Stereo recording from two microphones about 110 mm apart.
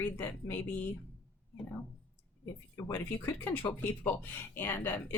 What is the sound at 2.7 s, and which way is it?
Speech, 25° left (ahead or behind).